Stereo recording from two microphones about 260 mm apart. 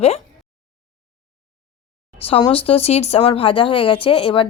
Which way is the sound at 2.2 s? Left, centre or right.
Left.